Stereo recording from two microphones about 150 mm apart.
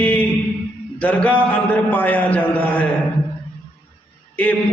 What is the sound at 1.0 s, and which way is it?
A man's voice, 10° left (ahead or behind).